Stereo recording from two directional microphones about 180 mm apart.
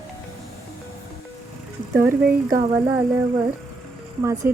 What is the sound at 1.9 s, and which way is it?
Speech, 15° right (ahead or behind).